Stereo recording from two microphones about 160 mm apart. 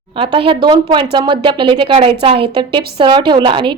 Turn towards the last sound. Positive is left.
turn(degrees=-30)  # may be behind; listen again after turning